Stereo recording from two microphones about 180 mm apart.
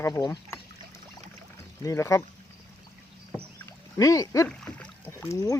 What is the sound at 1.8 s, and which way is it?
Speech, 15° left (ahead or behind).